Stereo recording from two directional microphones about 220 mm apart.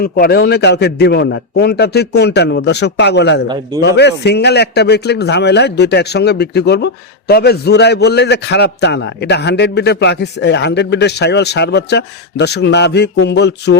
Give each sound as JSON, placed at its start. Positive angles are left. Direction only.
{"t": 0.0, "sound": "a man's voice", "side_deg": 45}